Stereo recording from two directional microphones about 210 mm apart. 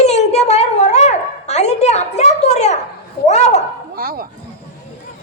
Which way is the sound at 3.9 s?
45° right (ahead or behind).